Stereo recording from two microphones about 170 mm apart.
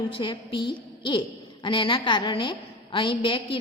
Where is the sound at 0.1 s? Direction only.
30° left (ahead or behind).